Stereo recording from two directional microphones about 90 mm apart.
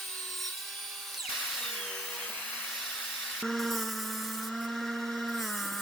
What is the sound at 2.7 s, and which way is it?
Hair dryer, 5° left (ahead or behind).